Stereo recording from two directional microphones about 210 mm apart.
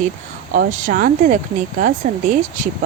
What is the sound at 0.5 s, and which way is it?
Speech, 40° right (ahead or behind).